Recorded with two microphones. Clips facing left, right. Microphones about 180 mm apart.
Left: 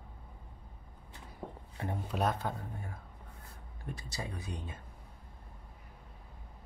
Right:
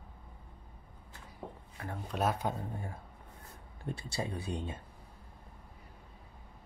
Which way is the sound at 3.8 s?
30° right (ahead or behind).